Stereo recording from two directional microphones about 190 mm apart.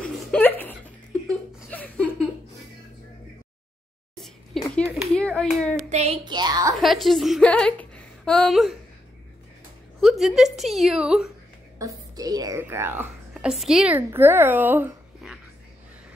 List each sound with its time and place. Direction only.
0.3 s a sound: 10° left (ahead or behind)
4.1 s a sound: 5° left (ahead or behind)
5.1 s clapping: 5° left (ahead or behind)
5.9 s a child's voice: 35° right (ahead or behind)
6.2 s a woman's voice: 20° right (ahead or behind)
6.8 s speech: centre (ahead or behind)
9.9 s a woman's voice: centre (ahead or behind)
11.8 s a woman's voice: 20° right (ahead or behind)